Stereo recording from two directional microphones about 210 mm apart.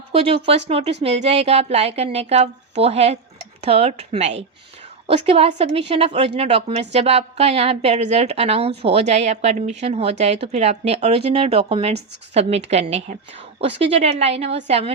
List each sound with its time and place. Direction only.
0.1 s a woman's voice: 30° right (ahead or behind)